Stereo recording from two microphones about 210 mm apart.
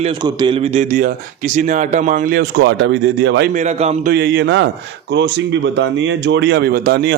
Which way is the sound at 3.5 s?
35° right (ahead or behind).